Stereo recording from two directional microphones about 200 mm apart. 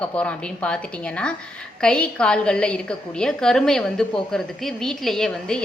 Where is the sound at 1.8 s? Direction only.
5° left (ahead or behind).